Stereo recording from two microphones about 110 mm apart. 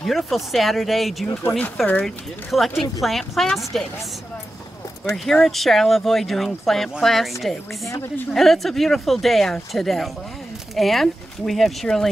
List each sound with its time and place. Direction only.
0.0 s speech: centre (ahead or behind)
1.9 s speech: 10° left (ahead or behind)
2.5 s speech: centre (ahead or behind)
5.1 s speech: 5° left (ahead or behind)
7.9 s a woman's voice: 20° left (ahead or behind)
8.3 s speech: centre (ahead or behind)